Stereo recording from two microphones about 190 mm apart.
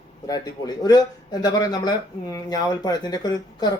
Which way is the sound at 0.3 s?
20° left (ahead or behind).